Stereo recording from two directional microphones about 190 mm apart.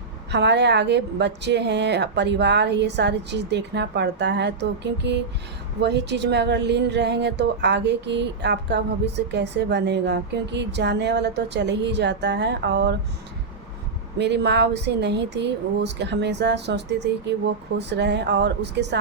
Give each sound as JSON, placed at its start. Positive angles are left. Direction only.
{"t": 0.3, "sound": "speech", "side_deg": -65}
{"t": 14.2, "sound": "speech", "side_deg": -65}